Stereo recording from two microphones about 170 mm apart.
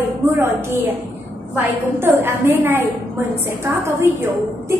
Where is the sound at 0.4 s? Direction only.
15° right (ahead or behind).